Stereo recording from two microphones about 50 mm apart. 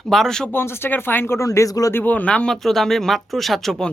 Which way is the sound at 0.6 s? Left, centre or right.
Left.